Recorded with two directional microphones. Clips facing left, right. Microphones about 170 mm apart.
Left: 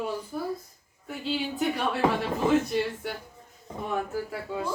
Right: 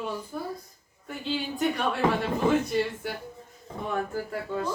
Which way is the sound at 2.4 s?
Centre (ahead or behind).